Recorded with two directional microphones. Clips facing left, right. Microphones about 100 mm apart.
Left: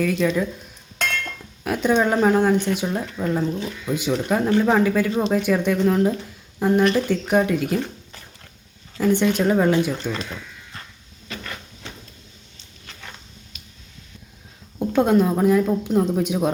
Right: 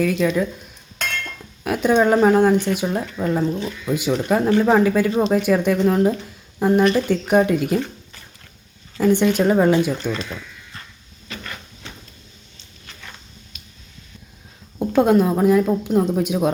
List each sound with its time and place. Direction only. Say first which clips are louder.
0.0 s speech: right 2 dB; 10° right (ahead or behind)
1.6 s speech: right 3 dB; 10° right (ahead or behind)
9.0 s speech: right 2 dB; 15° right (ahead or behind)
14.8 s a woman's voice: right 2 dB; 15° right (ahead or behind)